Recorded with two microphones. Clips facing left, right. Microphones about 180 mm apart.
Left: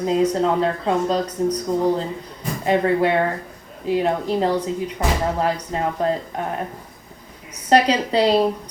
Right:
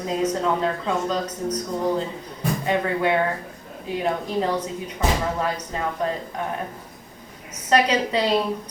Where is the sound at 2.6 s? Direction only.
30° left (ahead or behind).